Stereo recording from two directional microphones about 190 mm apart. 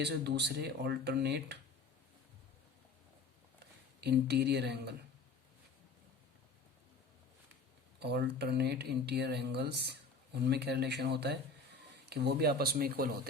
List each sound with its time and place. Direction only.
0.0 s speech: 60° right (ahead or behind)
4.0 s speech: 60° right (ahead or behind)
7.9 s speech: 60° right (ahead or behind)